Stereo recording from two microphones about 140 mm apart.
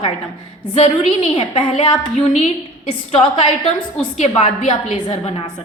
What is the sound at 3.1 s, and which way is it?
Speech, 35° left (ahead or behind).